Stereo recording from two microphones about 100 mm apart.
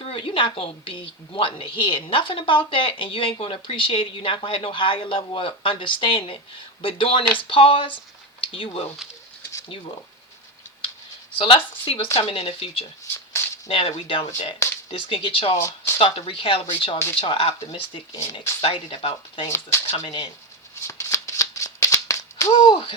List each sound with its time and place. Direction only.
0.0 s a woman's voice: 70° left (ahead or behind)
11.3 s a woman's voice: 65° left (ahead or behind)
13.1 s a sound: 25° left (ahead or behind)
13.7 s a woman's voice: 70° left (ahead or behind)
15.5 s speech: 25° left (ahead or behind)
16.0 s a woman's voice: 70° left (ahead or behind)
20.8 s rattle: 30° left (ahead or behind)
22.6 s a sound: 50° left (ahead or behind)